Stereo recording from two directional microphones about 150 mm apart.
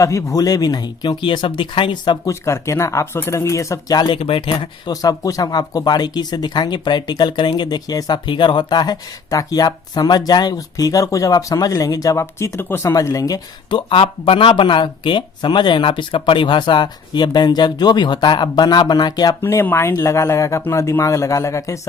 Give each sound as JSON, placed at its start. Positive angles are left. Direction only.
{"t": 0.0, "sound": "speech", "side_deg": 20}
{"t": 2.3, "sound": "speech", "side_deg": 20}